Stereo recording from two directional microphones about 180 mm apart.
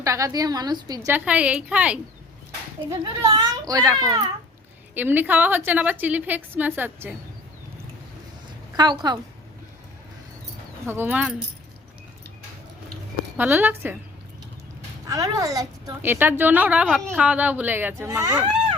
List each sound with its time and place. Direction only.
0.0 s a woman's voice: 15° right (ahead or behind)
2.9 s a child's voice: 20° right (ahead or behind)
8.7 s a woman's voice: 25° right (ahead or behind)
10.8 s a woman's voice: 10° right (ahead or behind)
13.3 s a woman's voice: 10° right (ahead or behind)
15.0 s a woman's voice: 20° right (ahead or behind)
16.8 s a woman's voice: centre (ahead or behind); by 18.3 s 15° right (ahead or behind)